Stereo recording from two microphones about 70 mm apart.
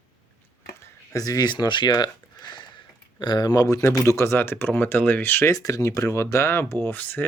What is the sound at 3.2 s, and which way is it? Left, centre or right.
Speech, left.